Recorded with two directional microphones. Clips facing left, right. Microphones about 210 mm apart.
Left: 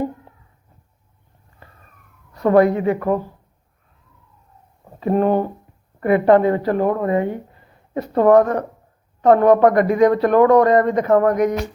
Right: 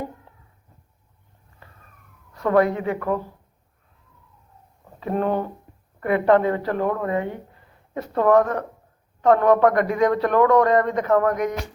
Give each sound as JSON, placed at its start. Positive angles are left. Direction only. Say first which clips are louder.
{"t": 2.3, "sound": "a woman's voice", "louder": "left 5 dB", "side_deg": 35}
{"t": 4.9, "sound": "speech", "louder": "left 6 dB", "side_deg": 30}